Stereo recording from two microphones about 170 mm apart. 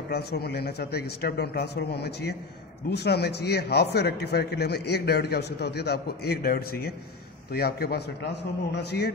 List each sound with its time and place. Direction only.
0.1 s a man's voice: 70° left (ahead or behind)